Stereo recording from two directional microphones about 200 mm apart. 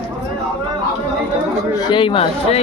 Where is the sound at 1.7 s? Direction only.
20° left (ahead or behind).